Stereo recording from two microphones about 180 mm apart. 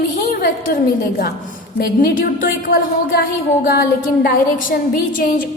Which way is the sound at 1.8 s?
55° left (ahead or behind).